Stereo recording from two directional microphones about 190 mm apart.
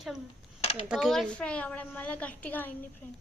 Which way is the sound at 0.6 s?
30° left (ahead or behind).